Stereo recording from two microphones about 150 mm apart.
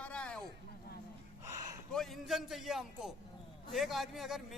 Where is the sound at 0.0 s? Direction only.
5° left (ahead or behind).